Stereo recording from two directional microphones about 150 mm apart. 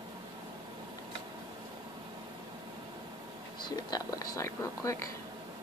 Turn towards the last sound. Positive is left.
turn(degrees=20)  # may be behind; listen again after turning